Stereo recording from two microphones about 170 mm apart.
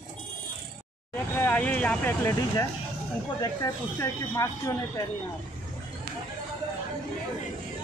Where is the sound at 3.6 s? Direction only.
20° left (ahead or behind).